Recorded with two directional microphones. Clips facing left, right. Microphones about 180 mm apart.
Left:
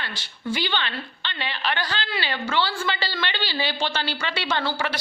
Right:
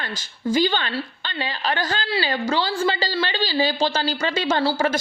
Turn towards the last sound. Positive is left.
turn(degrees=-40)  # may be behind; listen again after turning